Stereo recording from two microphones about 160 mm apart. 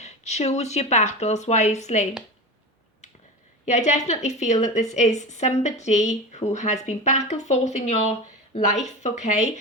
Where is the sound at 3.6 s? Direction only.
50° left (ahead or behind).